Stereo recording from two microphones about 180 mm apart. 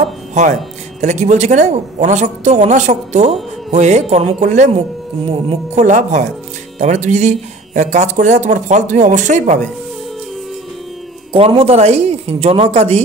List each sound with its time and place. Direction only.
0.3 s speech: 40° right (ahead or behind)
5.9 s speech: 40° right (ahead or behind)
11.3 s speech: 30° right (ahead or behind)